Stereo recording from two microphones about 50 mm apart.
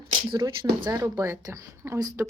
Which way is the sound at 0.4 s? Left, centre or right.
Right.